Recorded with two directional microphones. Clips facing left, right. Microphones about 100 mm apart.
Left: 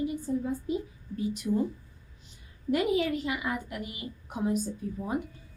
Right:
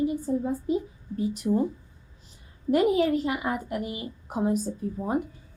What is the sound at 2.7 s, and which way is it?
A woman's voice, 35° right (ahead or behind).